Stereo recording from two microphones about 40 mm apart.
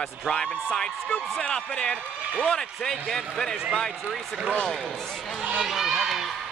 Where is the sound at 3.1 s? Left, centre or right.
Centre.